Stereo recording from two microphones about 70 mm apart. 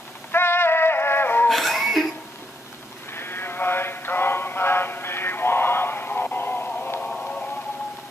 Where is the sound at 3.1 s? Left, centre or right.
Left.